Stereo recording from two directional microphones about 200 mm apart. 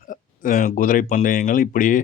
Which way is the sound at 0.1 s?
40° left (ahead or behind).